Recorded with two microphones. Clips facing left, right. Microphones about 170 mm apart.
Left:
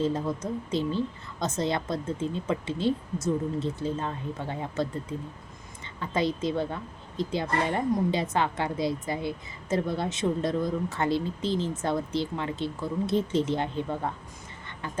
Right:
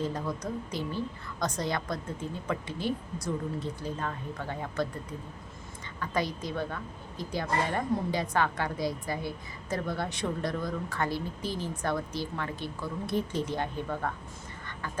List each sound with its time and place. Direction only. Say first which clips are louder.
0.0 s a woman's voice: left 5 dB; 25° left (ahead or behind)
6.0 s a woman's voice: left 4 dB; 25° left (ahead or behind)